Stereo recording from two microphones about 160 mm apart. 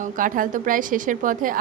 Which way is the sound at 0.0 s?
55° right (ahead or behind).